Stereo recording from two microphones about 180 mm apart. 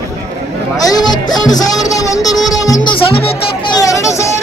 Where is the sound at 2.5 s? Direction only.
20° left (ahead or behind).